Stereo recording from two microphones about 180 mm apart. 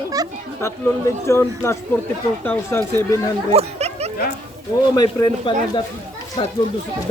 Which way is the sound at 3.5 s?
35° right (ahead or behind).